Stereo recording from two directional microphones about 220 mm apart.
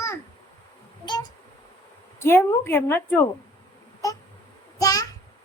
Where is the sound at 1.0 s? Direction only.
20° left (ahead or behind).